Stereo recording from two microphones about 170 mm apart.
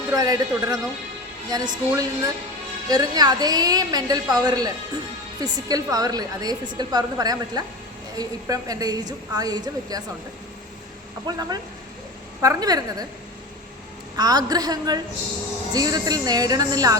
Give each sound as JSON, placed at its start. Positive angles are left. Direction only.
{"t": 0.1, "sound": "a woman's voice", "side_deg": -20}
{"t": 11.3, "sound": "a woman's voice", "side_deg": -25}
{"t": 14.2, "sound": "a woman's voice", "side_deg": -20}